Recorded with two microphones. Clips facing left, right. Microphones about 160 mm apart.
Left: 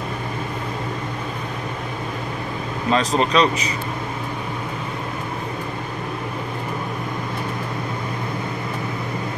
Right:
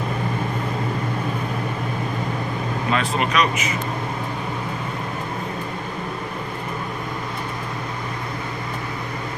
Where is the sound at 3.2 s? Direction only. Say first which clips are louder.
Left 3 dB; 30° left (ahead or behind).